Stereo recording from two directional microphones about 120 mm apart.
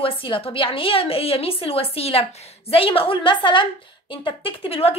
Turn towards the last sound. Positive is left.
turn(degrees=55)  # may be behind; listen again after turning